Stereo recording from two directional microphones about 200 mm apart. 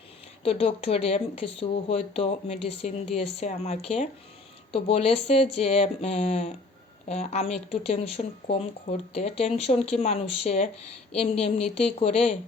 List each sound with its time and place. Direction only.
0.4 s speech: 30° left (ahead or behind)